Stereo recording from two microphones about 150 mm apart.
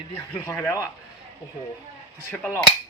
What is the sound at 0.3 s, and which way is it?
Speech, 20° left (ahead or behind).